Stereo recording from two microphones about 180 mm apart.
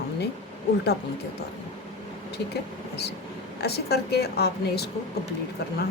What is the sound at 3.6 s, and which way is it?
A woman's voice, 65° left (ahead or behind).